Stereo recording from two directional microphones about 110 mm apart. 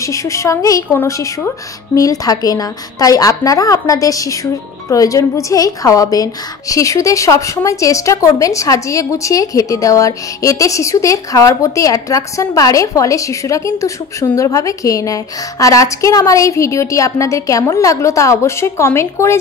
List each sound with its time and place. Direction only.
0.0 s a woman's voice: 30° left (ahead or behind)
2.0 s a woman's voice: 35° left (ahead or behind)